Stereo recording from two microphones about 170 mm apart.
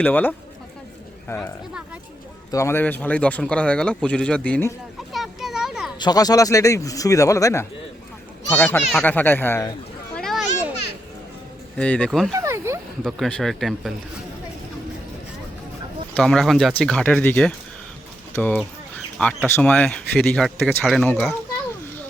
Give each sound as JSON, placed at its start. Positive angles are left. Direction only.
{"t": 0.0, "sound": "speech", "side_deg": 10}
{"t": 2.5, "sound": "speech", "side_deg": 15}
{"t": 5.1, "sound": "a sound", "side_deg": 0}
{"t": 6.0, "sound": "speech", "side_deg": 25}
{"t": 10.2, "sound": "children playing", "side_deg": 0}
{"t": 11.8, "sound": "speech", "side_deg": 5}
{"t": 12.4, "sound": "a sound", "side_deg": -15}
{"t": 13.1, "sound": "speech", "side_deg": 0}
{"t": 16.1, "sound": "speech", "side_deg": 5}